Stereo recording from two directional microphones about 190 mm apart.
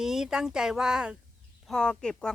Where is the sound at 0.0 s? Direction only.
5° right (ahead or behind).